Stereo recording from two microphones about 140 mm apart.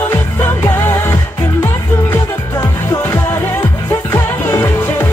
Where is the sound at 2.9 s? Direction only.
15° left (ahead or behind).